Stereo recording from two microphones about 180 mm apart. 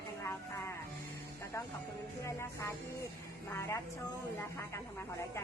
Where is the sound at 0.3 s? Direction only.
15° left (ahead or behind).